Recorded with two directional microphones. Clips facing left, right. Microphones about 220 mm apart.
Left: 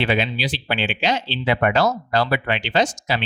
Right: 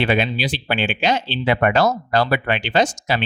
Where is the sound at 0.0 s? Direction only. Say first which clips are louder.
Right 2 dB; 50° right (ahead or behind).